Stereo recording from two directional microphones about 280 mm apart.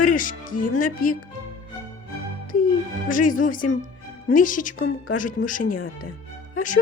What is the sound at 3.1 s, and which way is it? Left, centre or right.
Speech, left.